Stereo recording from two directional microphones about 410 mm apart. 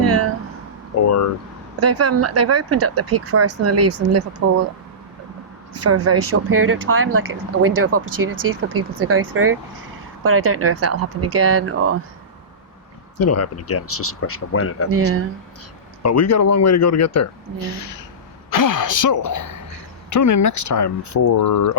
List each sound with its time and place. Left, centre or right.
1.0 s speech: left
1.8 s speech: right
5.8 s speech: right
13.1 s speech: left
14.8 s speech: right
16.0 s speech: left